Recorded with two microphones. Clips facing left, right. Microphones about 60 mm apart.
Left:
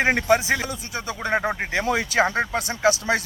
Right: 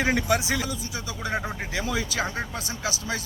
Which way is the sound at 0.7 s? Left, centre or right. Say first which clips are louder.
Left 3 dB; left.